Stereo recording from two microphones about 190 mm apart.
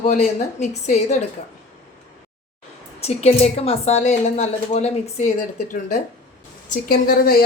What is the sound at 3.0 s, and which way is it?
A woman's voice, 35° left (ahead or behind).